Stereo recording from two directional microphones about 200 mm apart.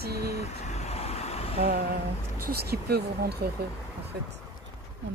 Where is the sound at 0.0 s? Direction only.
50° right (ahead or behind).